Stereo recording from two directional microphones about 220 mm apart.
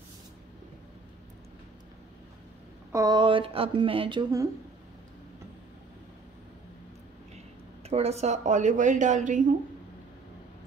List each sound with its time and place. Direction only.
2.9 s speech: 15° right (ahead or behind)
7.9 s a woman's voice: 30° right (ahead or behind)